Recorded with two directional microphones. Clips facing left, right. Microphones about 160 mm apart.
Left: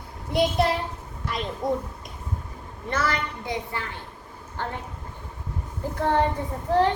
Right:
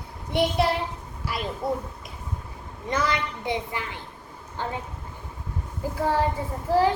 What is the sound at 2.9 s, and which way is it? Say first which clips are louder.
A woman's voice: right 1 dB; 15° right (ahead or behind).